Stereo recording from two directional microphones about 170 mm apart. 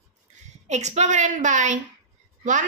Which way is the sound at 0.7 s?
40° right (ahead or behind).